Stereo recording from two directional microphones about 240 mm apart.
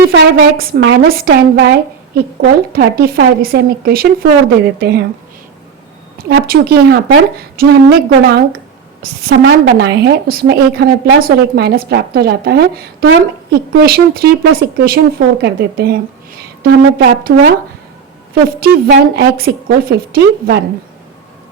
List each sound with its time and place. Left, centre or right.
0.1 s a woman's voice: right
2.7 s a woman's voice: right
6.1 s a woman's voice: right
17.3 s a woman's voice: right